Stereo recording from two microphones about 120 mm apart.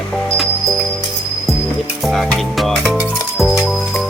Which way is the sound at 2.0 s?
Centre (ahead or behind).